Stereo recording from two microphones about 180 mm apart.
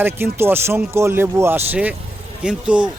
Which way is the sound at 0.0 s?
10° right (ahead or behind).